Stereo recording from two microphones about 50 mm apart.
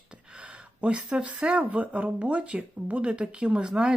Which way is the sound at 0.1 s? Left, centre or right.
Centre.